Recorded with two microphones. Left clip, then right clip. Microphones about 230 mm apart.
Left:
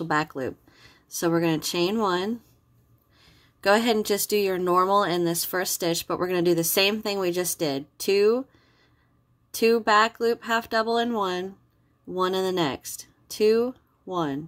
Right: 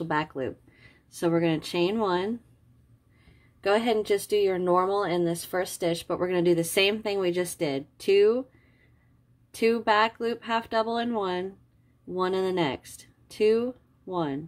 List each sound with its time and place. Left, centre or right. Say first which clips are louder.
0.0 s speech: left 3 dB; centre
3.6 s speech: left 3 dB; left
9.6 s speech: left 3 dB; centre